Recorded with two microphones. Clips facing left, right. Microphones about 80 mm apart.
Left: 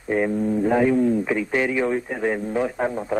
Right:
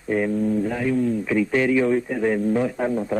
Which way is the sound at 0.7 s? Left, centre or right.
Left.